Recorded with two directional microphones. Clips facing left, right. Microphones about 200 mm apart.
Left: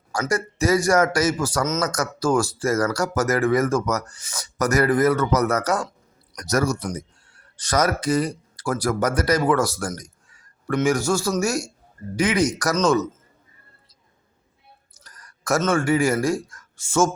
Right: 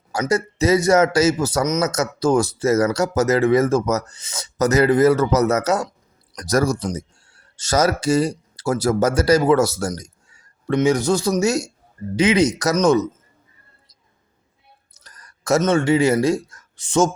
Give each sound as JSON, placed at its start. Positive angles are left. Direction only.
{"t": 0.1, "sound": "a man's voice", "side_deg": -25}
{"t": 6.3, "sound": "a man's voice", "side_deg": -35}
{"t": 10.0, "sound": "a sound", "side_deg": -25}
{"t": 10.8, "sound": "a man's voice", "side_deg": -20}
{"t": 15.0, "sound": "a sound", "side_deg": -25}
{"t": 15.6, "sound": "a man's voice", "side_deg": -25}